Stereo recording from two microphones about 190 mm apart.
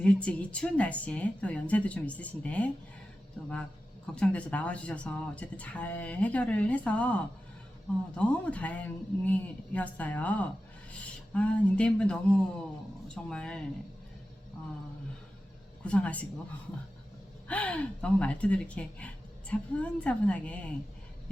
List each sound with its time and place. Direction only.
0.0 s speech: 5° left (ahead or behind)
13.3 s speech: 5° left (ahead or behind)
15.8 s speech: 5° left (ahead or behind)
17.5 s speech: 5° left (ahead or behind)